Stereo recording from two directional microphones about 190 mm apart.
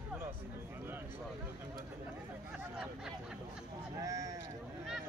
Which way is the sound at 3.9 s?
15° right (ahead or behind).